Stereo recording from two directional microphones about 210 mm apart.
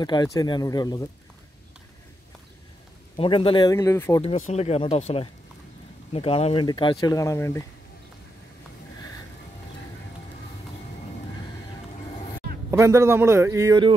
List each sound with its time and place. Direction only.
0.0 s speech: 20° left (ahead or behind)
3.2 s speech: 25° left (ahead or behind)
4.2 s speech: 30° left (ahead or behind); by 7.6 s 15° left (ahead or behind)
12.7 s a man's voice: 15° right (ahead or behind)